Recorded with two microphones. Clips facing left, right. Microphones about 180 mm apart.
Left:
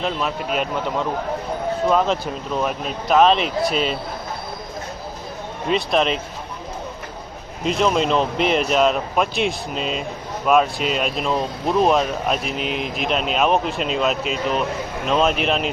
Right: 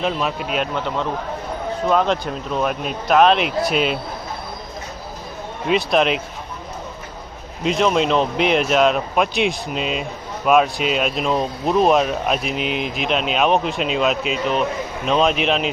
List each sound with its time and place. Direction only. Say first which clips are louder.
0.0 s speech: right 2 dB; centre (ahead or behind)
5.6 s speech: right 2 dB; 5° right (ahead or behind)
7.6 s speech: right 1 dB; centre (ahead or behind)